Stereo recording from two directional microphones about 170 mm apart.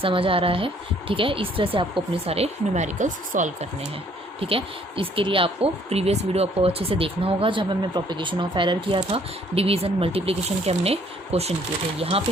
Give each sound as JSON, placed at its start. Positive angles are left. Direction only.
{"t": 0.0, "sound": "speech", "side_deg": -30}
{"t": 4.4, "sound": "speech", "side_deg": -35}